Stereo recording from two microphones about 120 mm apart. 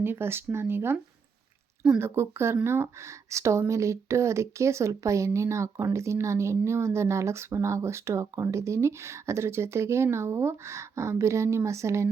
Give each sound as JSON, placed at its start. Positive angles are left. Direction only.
{"t": 0.0, "sound": "speech", "side_deg": -20}
{"t": 2.0, "sound": "speech", "side_deg": -20}